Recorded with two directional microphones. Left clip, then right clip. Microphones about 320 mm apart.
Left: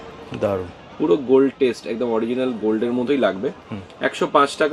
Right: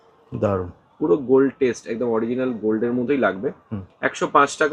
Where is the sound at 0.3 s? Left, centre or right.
Right.